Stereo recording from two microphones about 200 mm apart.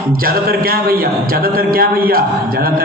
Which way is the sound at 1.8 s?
45° right (ahead or behind).